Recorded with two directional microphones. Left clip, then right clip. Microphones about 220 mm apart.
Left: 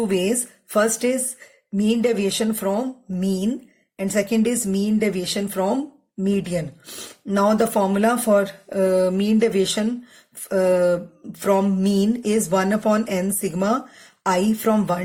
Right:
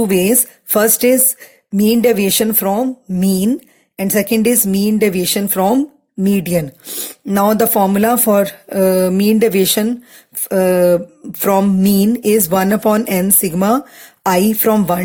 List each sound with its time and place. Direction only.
0.1 s a woman's voice: 45° right (ahead or behind)